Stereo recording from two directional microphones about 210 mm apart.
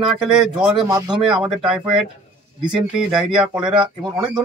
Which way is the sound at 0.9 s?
20° right (ahead or behind).